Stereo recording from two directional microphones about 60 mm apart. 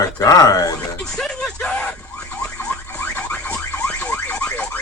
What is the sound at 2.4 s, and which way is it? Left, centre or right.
Alarm, centre.